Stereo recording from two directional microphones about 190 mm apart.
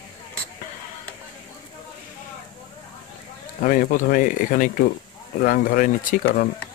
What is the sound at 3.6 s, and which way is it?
Speech, 45° left (ahead or behind).